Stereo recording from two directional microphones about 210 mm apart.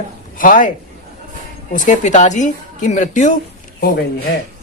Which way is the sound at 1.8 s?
35° left (ahead or behind).